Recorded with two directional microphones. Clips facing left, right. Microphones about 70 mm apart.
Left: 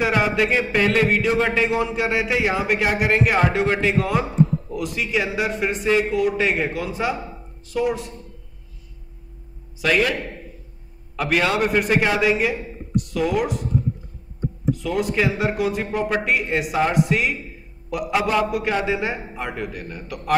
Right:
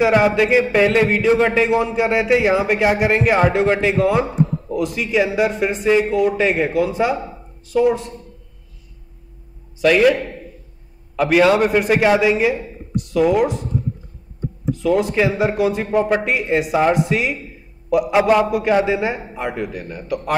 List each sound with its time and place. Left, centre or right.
0.0 s a man's voice: centre
9.8 s a man's voice: centre
11.1 s a man's voice: centre
14.7 s a man's voice: centre
15.9 s speech: centre
16.3 s a man's voice: centre
18.5 s a man's voice: centre